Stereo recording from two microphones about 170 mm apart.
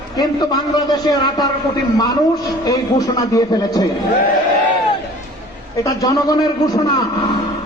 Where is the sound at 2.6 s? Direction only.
20° left (ahead or behind).